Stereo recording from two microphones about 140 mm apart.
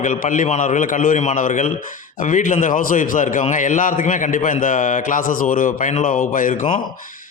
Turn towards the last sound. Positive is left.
turn(degrees=70)  # may be behind; listen again after turning